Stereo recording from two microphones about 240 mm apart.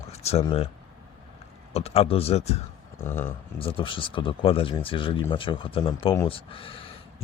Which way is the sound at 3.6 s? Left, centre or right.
Left.